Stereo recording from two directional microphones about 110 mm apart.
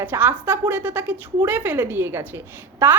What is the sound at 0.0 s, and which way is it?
A woman's voice, 20° right (ahead or behind).